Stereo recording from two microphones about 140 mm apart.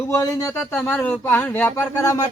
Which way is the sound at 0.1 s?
25° left (ahead or behind).